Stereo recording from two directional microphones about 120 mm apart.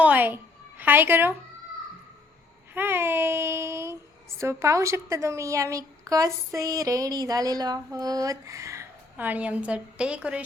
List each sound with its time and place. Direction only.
0.0 s a sound: 15° right (ahead or behind)
0.8 s speech: 15° right (ahead or behind)
2.7 s child singing: 20° right (ahead or behind)
4.4 s a woman's voice: 25° right (ahead or behind)
9.1 s a woman's voice: 15° right (ahead or behind)